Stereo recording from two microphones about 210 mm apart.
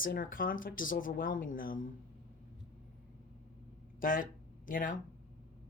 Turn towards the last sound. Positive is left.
turn(degrees=40)  # may be behind; listen again after turning